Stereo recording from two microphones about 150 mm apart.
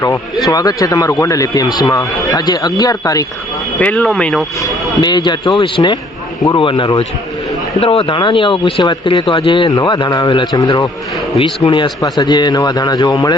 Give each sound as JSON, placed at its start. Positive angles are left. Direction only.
{"t": 0.5, "sound": "a man's voice", "side_deg": 25}
{"t": 3.8, "sound": "speech", "side_deg": 10}
{"t": 4.6, "sound": "a man's voice", "side_deg": 30}